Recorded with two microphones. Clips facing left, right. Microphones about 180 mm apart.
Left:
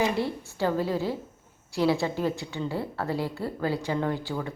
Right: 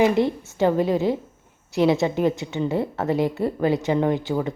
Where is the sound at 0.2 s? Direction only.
20° right (ahead or behind).